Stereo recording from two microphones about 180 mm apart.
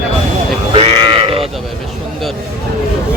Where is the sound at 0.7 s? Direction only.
30° right (ahead or behind).